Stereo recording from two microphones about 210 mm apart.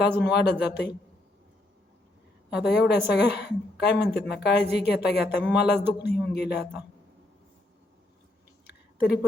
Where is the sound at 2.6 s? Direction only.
55° left (ahead or behind).